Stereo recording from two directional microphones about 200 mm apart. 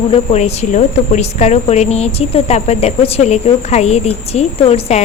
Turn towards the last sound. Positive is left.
turn(degrees=30)  # may be behind; listen again after turning